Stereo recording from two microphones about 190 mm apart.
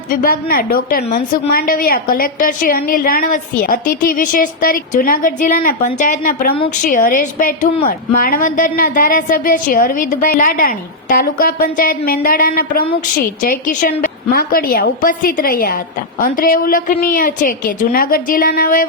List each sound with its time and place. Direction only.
0.1 s a woman's voice: 45° left (ahead or behind)